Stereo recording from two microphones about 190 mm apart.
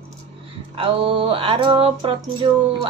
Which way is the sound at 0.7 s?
30° right (ahead or behind).